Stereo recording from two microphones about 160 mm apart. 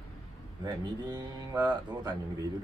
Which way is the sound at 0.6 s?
25° right (ahead or behind).